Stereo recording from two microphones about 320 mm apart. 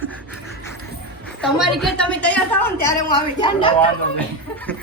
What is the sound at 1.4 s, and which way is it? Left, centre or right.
A woman's voice, centre.